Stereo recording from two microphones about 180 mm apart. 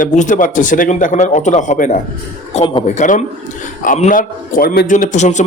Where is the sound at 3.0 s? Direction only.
45° left (ahead or behind).